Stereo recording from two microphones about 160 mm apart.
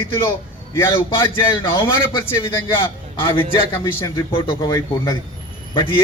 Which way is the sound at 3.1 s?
35° left (ahead or behind).